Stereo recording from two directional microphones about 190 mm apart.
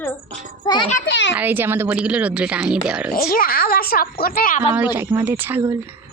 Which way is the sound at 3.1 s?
50° left (ahead or behind).